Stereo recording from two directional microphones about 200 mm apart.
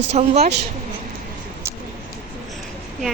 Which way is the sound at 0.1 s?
30° right (ahead or behind).